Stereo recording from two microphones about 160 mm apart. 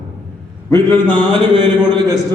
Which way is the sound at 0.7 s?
15° left (ahead or behind).